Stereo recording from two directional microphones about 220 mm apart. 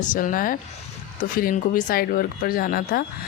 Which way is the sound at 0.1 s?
35° left (ahead or behind).